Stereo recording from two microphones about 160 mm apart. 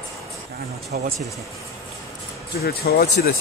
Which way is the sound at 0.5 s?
75° right (ahead or behind).